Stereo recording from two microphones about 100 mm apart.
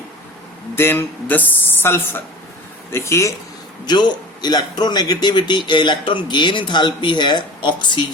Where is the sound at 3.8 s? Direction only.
45° left (ahead or behind).